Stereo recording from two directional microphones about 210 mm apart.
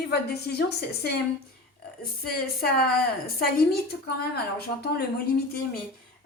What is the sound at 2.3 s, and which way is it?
A woman's voice, 45° left (ahead or behind).